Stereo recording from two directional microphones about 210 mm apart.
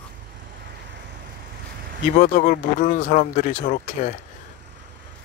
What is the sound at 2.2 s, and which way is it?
Speech, 35° left (ahead or behind).